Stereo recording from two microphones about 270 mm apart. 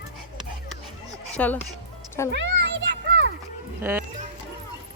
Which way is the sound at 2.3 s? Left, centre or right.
Right.